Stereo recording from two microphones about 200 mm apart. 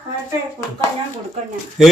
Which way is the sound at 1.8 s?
5° right (ahead or behind).